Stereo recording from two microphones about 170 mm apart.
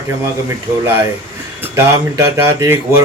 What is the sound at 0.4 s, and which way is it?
Speech, 15° right (ahead or behind).